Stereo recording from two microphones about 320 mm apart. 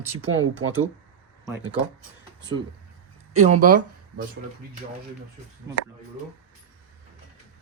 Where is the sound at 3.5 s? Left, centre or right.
Right.